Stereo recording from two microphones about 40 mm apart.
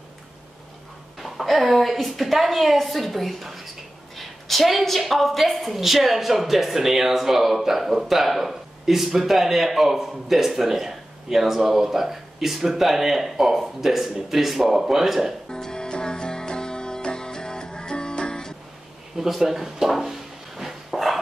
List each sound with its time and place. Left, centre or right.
1.2 s a woman's voice: centre
3.3 s a sound: centre
4.2 s a woman's voice: centre
15.5 s music: centre
19.1 s speech: centre
19.9 s a sound: centre